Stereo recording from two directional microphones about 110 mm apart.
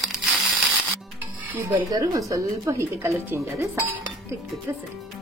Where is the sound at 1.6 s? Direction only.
30° right (ahead or behind).